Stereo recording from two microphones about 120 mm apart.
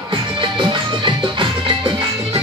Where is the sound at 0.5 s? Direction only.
45° right (ahead or behind).